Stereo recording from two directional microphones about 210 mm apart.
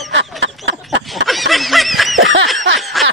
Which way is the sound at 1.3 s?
Centre (ahead or behind).